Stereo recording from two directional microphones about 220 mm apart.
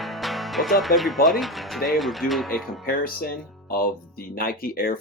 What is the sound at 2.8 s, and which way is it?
Speech, 40° left (ahead or behind).